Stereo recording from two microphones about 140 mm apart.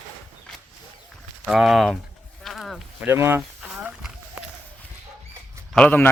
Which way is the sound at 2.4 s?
Centre (ahead or behind).